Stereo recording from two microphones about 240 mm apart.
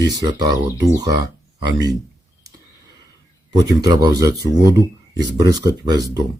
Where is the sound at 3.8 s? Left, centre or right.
Centre.